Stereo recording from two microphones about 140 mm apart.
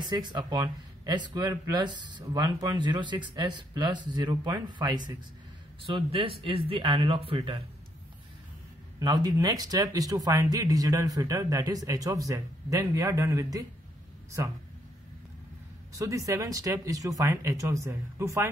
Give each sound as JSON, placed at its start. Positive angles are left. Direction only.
{"t": 0.0, "sound": "speech", "side_deg": -30}
{"t": 9.0, "sound": "speech", "side_deg": -30}
{"t": 15.9, "sound": "speech", "side_deg": -25}